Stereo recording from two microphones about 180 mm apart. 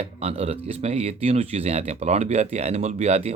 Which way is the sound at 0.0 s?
35° right (ahead or behind).